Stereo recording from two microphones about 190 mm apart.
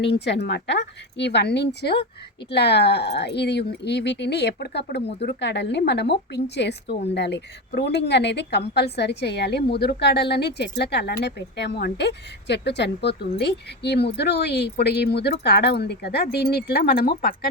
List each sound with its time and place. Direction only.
0.0 s a woman's voice: 60° left (ahead or behind)